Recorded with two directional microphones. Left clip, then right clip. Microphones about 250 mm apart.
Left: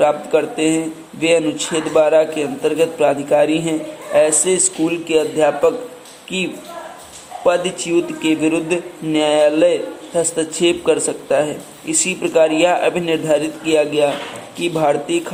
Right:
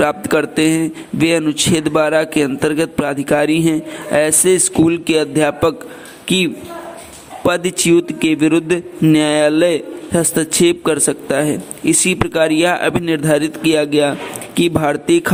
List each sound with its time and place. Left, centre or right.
0.0 s a man's voice: right
7.9 s a man's voice: right